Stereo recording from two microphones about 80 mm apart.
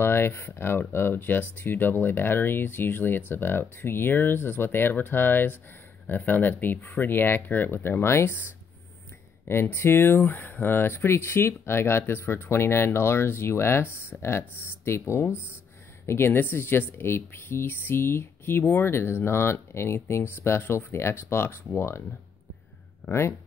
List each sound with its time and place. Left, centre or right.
0.0 s speech: left
9.5 s speech: left
23.0 s speech: left